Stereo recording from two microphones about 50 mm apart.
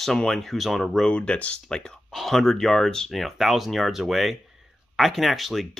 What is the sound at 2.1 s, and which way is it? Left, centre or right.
Speech, centre.